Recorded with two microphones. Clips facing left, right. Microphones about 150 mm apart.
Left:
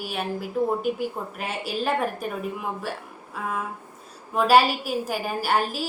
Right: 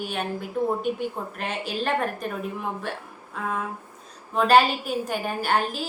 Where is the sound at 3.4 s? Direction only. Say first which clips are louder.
Right 1 dB; 5° left (ahead or behind).